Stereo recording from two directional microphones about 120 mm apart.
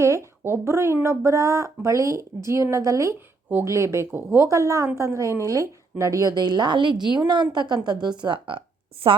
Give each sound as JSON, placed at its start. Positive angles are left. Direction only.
{"t": 0.0, "sound": "a woman's voice", "side_deg": -25}